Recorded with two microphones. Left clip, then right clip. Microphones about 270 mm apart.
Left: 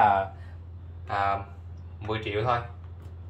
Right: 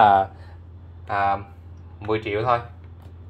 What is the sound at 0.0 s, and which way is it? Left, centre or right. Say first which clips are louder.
Speech: right 6 dB; right.